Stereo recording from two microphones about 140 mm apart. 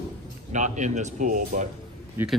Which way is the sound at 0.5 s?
60° right (ahead or behind).